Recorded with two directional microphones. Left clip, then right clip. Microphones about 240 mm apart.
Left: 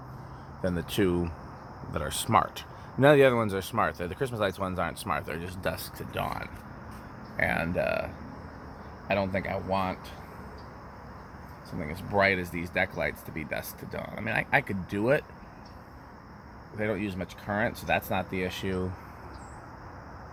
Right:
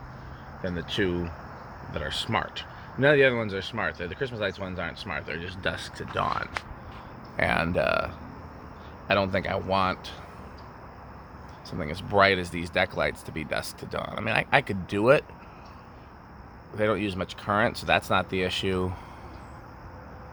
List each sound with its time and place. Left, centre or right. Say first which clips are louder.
0.6 s speech: even; centre
7.3 s speech: right 3 dB; right
11.8 s speech: right 4 dB; right
16.7 s speech: right 5 dB; right